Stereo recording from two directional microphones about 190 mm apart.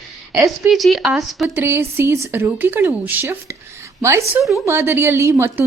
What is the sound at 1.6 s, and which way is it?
Speech, 15° right (ahead or behind).